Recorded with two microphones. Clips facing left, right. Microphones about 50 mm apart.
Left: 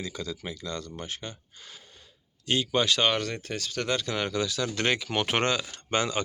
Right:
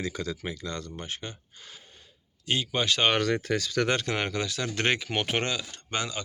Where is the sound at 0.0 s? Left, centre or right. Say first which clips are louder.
Right 3 dB; right.